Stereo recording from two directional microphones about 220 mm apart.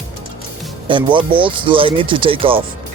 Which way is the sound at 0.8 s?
20° right (ahead or behind).